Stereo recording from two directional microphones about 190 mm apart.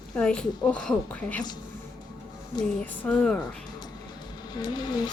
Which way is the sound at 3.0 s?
5° left (ahead or behind).